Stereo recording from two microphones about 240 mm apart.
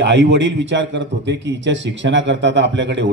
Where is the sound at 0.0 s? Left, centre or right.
Right.